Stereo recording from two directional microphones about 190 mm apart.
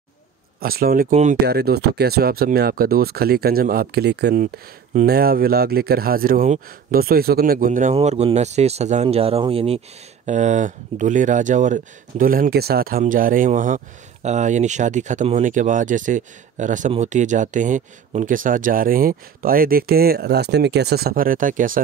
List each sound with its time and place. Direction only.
0.6 s speech: 50° right (ahead or behind)